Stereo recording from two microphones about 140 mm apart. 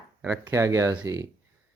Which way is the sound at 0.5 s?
20° right (ahead or behind).